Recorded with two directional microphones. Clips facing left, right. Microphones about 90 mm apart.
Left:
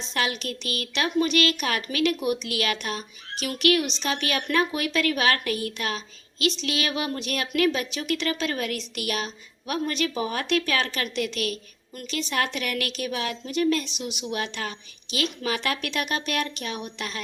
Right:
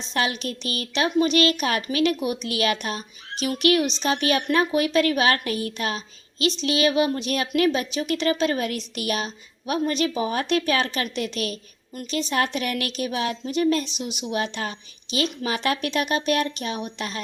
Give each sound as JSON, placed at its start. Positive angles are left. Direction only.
{"t": 0.1, "sound": "a woman's voice", "side_deg": -30}